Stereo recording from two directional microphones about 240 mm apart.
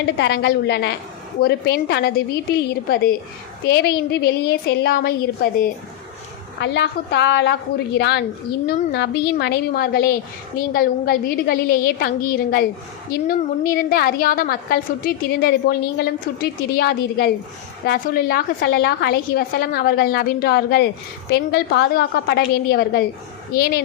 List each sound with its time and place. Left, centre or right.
0.2 s a woman's voice: left
6.6 s a woman's voice: left
13.7 s a woman's voice: left